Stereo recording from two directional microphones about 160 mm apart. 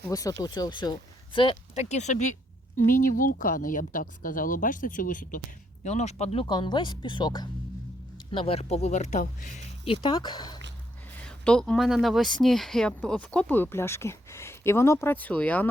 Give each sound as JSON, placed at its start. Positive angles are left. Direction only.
{"t": 0.1, "sound": "speech", "side_deg": 20}
{"t": 2.7, "sound": "speech", "side_deg": 60}
{"t": 5.8, "sound": "speech", "side_deg": 45}
{"t": 6.4, "sound": "speech", "side_deg": 30}
{"t": 9.8, "sound": "speech", "side_deg": 35}
{"t": 11.2, "sound": "speech", "side_deg": 5}